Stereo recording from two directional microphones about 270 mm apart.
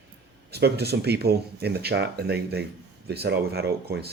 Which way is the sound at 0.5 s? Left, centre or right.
Right.